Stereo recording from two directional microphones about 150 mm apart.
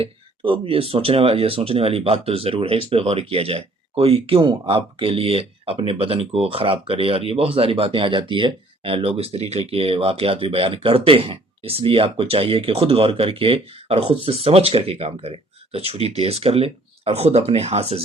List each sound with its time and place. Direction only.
0.0 s speech: 35° right (ahead or behind)